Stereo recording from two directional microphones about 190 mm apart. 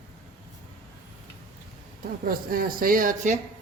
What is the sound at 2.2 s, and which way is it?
Speech, 50° right (ahead or behind).